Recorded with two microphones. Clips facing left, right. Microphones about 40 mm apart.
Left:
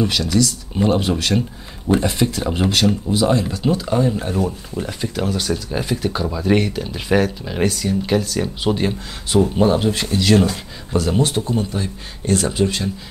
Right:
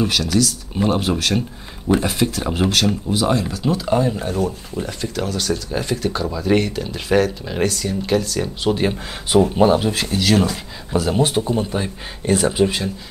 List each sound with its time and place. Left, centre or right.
0.0 s speech: centre
3.8 s speech: centre
10.0 s speech: centre
11.7 s speech: right
12.4 s speech: centre